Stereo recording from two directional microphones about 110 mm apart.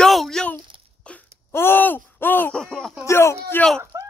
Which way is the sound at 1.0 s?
10° left (ahead or behind).